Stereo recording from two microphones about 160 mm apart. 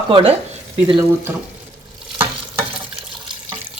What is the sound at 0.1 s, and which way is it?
Speech, 35° right (ahead or behind).